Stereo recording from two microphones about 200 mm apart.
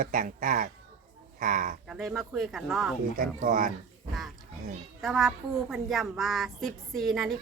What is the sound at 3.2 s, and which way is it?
Speech, 40° right (ahead or behind).